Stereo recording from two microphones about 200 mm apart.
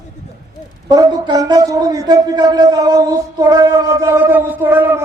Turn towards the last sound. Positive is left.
turn(degrees=-10)  # may be behind; listen again after turning